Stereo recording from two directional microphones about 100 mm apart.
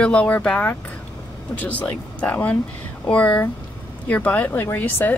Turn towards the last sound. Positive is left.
turn(degrees=20)  # may be behind; listen again after turning